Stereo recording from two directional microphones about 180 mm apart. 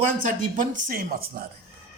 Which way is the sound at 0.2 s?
45° right (ahead or behind).